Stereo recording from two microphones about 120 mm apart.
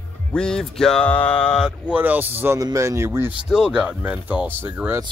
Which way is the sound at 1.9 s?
15° right (ahead or behind).